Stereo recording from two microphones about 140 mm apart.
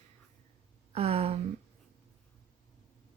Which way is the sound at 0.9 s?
45° right (ahead or behind).